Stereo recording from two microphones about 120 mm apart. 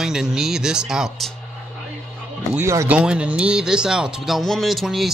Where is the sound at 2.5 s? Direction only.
25° right (ahead or behind).